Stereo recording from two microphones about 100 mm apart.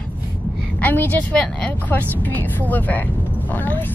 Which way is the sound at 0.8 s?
15° left (ahead or behind).